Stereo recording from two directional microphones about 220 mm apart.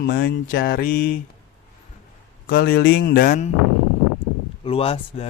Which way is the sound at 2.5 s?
45° left (ahead or behind).